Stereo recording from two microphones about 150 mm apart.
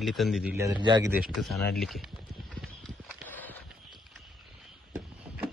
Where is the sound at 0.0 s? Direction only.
Centre (ahead or behind).